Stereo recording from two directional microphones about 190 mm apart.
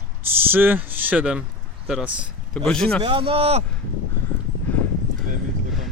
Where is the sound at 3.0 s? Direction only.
25° right (ahead or behind).